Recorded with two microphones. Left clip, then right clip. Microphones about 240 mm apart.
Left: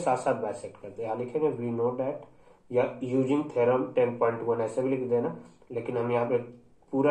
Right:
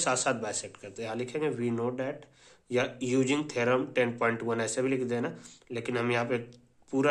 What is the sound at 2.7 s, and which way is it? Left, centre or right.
Speech, right.